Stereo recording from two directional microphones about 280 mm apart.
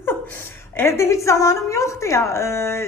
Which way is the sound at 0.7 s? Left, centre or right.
Centre.